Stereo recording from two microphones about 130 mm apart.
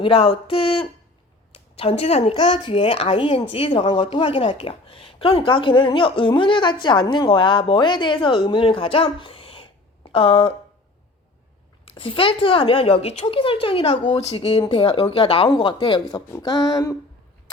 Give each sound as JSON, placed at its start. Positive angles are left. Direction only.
{"t": 0.0, "sound": "a woman's voice", "side_deg": 45}
{"t": 2.3, "sound": "speech", "side_deg": 40}
{"t": 11.9, "sound": "speech", "side_deg": 45}
{"t": 16.3, "sound": "a sound", "side_deg": 30}